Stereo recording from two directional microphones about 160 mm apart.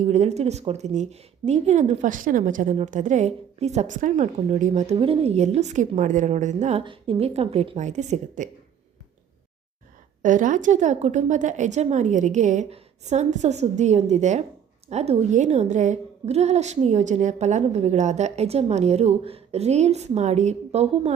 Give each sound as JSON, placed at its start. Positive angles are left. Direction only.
{"t": 0.0, "sound": "a woman's voice", "side_deg": -45}
{"t": 10.2, "sound": "a woman's voice", "side_deg": -55}